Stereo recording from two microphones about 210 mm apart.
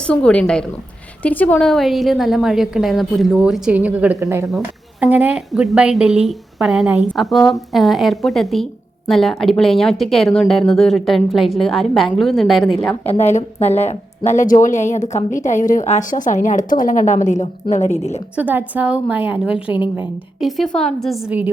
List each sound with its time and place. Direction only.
0.1 s a woman's voice: 5° left (ahead or behind)
13.1 s speech: 30° left (ahead or behind)
18.3 s a woman's voice: 5° right (ahead or behind)